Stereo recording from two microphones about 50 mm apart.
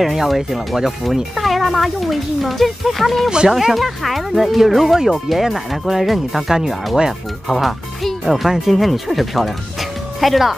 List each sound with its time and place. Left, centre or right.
0.0 s speech: centre
3.3 s speech: centre
3.5 s speech: centre